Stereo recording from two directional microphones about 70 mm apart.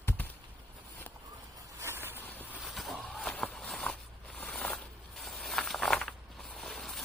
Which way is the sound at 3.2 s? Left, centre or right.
Centre.